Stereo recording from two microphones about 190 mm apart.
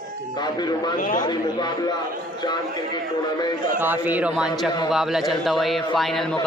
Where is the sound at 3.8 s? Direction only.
10° right (ahead or behind).